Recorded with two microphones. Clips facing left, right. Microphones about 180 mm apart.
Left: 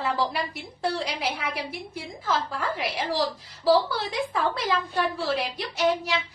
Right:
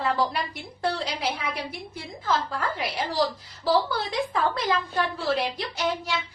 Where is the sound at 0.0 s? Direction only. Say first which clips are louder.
Right 1 dB; 5° left (ahead or behind).